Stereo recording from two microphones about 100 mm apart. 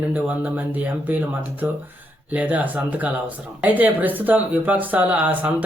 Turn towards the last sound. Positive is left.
turn(degrees=-15)  # may be behind; listen again after turning